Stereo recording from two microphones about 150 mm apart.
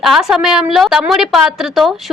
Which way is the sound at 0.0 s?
Centre (ahead or behind).